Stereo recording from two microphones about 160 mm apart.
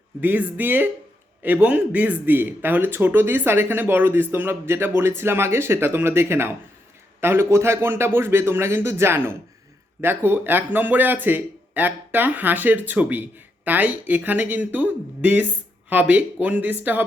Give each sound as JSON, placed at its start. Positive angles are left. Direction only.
{"t": 0.2, "sound": "speech", "side_deg": -10}